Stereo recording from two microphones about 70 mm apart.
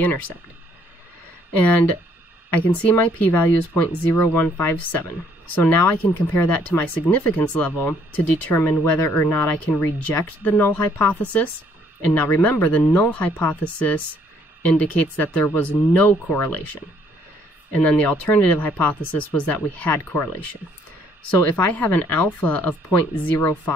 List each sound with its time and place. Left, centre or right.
1.5 s speech: left
17.7 s speech: left
21.4 s speech: left